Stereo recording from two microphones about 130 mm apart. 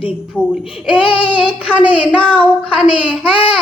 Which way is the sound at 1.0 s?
45° left (ahead or behind).